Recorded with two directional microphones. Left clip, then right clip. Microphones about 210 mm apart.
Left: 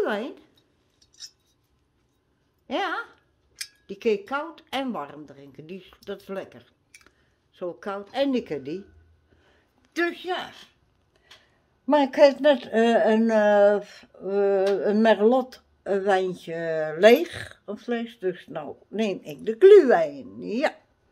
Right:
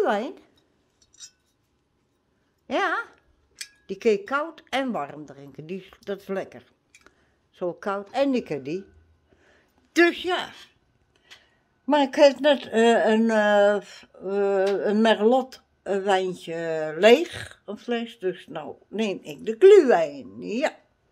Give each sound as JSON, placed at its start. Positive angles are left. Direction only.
{"t": 0.0, "sound": "a woman's voice", "side_deg": -20}
{"t": 2.6, "sound": "speech", "side_deg": -20}
{"t": 9.9, "sound": "a man's voice", "side_deg": -60}
{"t": 10.2, "sound": "a man's voice", "side_deg": -35}
{"t": 11.8, "sound": "speech", "side_deg": -10}